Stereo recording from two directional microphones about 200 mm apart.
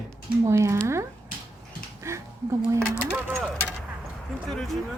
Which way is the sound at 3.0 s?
5° right (ahead or behind).